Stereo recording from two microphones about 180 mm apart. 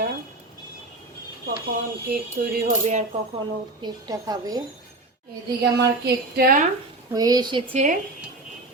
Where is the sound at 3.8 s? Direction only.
20° right (ahead or behind).